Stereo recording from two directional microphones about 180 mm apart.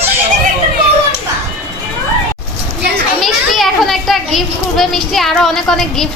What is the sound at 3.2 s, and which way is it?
A child's voice, centre (ahead or behind).